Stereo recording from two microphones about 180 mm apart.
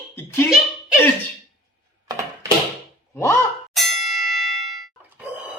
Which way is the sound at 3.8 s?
Centre (ahead or behind).